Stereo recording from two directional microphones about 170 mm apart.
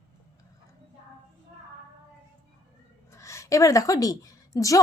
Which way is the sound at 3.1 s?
15° left (ahead or behind).